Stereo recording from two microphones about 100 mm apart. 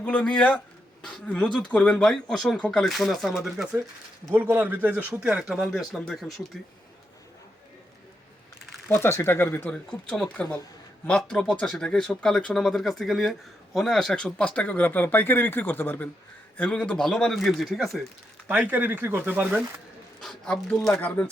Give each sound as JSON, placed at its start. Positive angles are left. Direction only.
{"t": 0.0, "sound": "speech", "side_deg": 10}
{"t": 4.4, "sound": "speech", "side_deg": -20}
{"t": 8.9, "sound": "speech", "side_deg": 25}
{"t": 9.7, "sound": "speech", "side_deg": 10}
{"t": 18.4, "sound": "speech", "side_deg": -15}
{"t": 20.2, "sound": "speech", "side_deg": 5}